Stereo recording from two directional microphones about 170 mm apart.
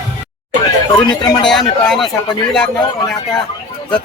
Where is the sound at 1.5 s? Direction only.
Centre (ahead or behind).